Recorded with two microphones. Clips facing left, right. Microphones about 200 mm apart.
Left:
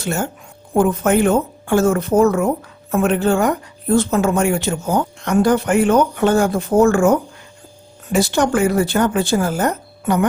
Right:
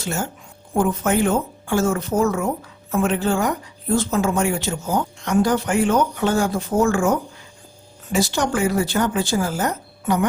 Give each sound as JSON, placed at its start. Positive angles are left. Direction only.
{"t": 0.0, "sound": "speech", "side_deg": 60}